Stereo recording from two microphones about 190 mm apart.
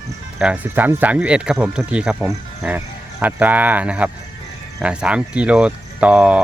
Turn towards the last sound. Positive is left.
turn(degrees=-5)  # may be behind; listen again after turning